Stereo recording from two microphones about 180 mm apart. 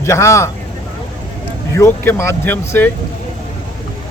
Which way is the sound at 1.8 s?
15° left (ahead or behind).